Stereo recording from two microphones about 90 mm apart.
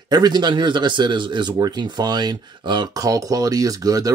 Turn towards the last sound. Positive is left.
turn(degrees=-40)  # may be behind; listen again after turning